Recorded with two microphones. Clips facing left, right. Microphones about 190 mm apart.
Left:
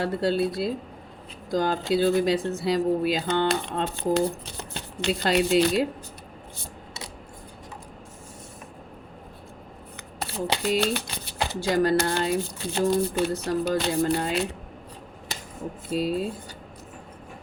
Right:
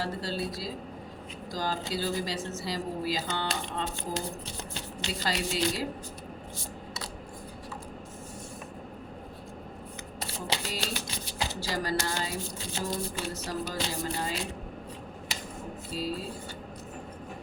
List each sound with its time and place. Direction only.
0.0 s speech: 60° left (ahead or behind)
10.2 s speech: 60° left (ahead or behind)
15.9 s speech: 60° left (ahead or behind)